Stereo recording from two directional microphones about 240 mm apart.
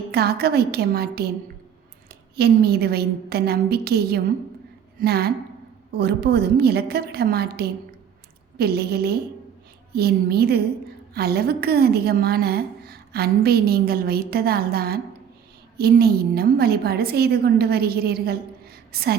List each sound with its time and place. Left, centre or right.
0.1 s a woman's voice: right